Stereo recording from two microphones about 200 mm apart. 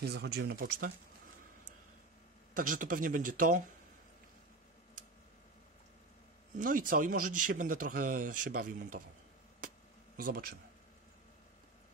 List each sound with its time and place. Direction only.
0.0 s speech: 55° right (ahead or behind)
2.5 s speech: 40° right (ahead or behind)
6.6 s speech: 45° right (ahead or behind)
10.1 s speech: 45° right (ahead or behind)